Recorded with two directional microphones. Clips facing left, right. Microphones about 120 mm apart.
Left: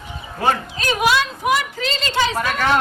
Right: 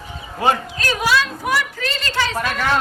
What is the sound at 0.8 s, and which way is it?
Speech, 20° left (ahead or behind).